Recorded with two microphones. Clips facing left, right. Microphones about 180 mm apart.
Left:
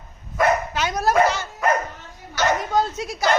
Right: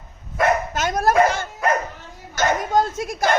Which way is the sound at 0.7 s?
45° right (ahead or behind).